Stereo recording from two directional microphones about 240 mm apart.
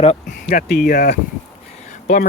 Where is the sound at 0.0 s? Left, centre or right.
Left.